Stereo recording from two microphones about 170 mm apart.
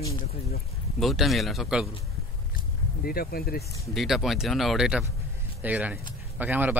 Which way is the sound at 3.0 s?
60° left (ahead or behind).